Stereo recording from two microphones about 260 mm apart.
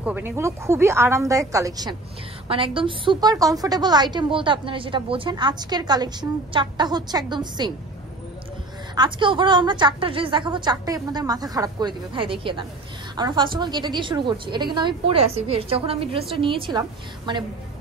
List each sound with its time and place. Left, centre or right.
0.0 s a woman's voice: centre
8.9 s a woman's voice: centre